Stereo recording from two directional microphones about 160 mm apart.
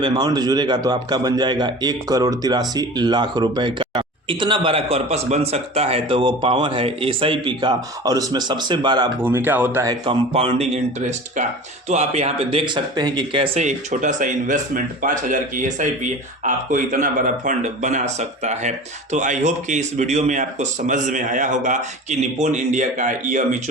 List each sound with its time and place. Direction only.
0.0 s a man's voice: 25° right (ahead or behind)
9.2 s speech: 10° right (ahead or behind)
10.3 s speech: 35° right (ahead or behind); by 23.6 s 50° right (ahead or behind)